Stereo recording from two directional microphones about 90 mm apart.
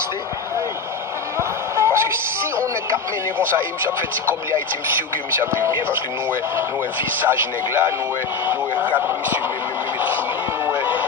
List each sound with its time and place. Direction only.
1.4 s music: 30° right (ahead or behind)
3.3 s speech: 25° right (ahead or behind)
7.2 s speech: 25° right (ahead or behind)
9.0 s speech: 20° right (ahead or behind)
9.9 s a sound: 20° right (ahead or behind)
10.7 s music: 20° right (ahead or behind)